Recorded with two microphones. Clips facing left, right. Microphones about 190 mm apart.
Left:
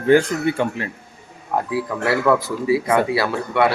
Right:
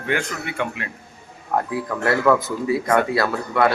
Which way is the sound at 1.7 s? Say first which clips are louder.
Left 2 dB; 10° left (ahead or behind).